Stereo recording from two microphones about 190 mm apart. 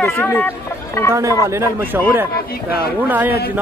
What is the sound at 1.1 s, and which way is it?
Speech, 15° right (ahead or behind).